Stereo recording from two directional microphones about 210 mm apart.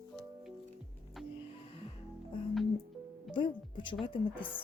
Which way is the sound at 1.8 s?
25° left (ahead or behind).